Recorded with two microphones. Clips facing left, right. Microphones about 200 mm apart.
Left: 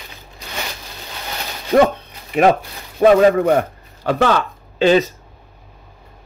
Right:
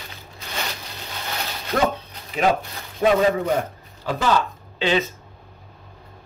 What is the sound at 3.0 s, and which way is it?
Speech, 55° left (ahead or behind).